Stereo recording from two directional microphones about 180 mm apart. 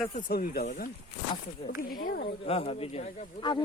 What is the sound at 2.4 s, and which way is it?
Speech, 35° left (ahead or behind).